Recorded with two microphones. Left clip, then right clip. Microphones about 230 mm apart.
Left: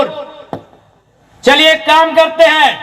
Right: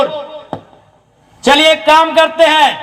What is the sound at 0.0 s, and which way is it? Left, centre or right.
Music, right.